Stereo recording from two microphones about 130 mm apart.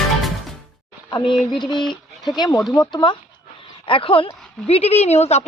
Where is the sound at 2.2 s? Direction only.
30° left (ahead or behind).